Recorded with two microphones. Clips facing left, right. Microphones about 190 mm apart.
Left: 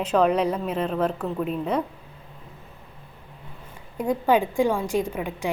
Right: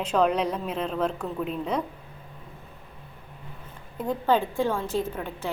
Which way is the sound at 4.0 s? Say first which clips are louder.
Left 3 dB; 15° left (ahead or behind).